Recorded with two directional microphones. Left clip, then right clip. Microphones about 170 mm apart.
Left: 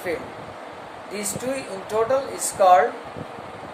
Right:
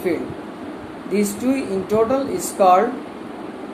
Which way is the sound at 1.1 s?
5° right (ahead or behind).